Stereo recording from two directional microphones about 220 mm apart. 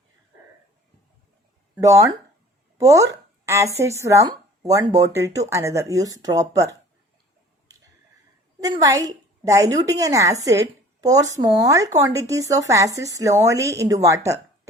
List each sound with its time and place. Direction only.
1.7 s a woman's voice: 15° right (ahead or behind)
8.6 s a woman's voice: 15° right (ahead or behind)